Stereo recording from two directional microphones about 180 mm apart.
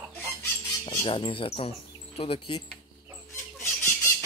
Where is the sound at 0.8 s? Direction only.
30° left (ahead or behind).